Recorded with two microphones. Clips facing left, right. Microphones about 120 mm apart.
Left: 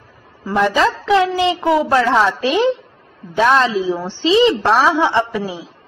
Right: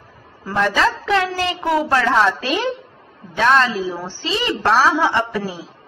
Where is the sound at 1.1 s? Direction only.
15° left (ahead or behind).